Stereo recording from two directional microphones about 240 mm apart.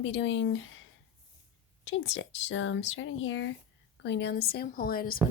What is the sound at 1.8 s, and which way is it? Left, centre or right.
A woman's voice, left.